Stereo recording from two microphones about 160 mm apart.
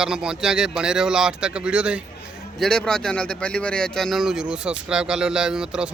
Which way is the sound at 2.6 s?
5° left (ahead or behind).